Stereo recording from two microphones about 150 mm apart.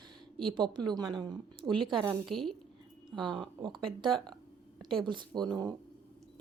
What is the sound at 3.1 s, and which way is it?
A woman's voice, 30° right (ahead or behind).